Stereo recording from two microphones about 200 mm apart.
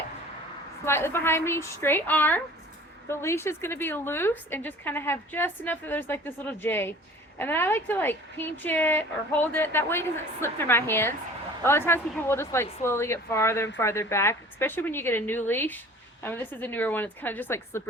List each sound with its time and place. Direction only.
0.9 s a woman's voice: 10° left (ahead or behind)